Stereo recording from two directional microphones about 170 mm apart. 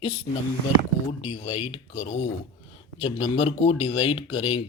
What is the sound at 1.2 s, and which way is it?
Speech, 40° left (ahead or behind).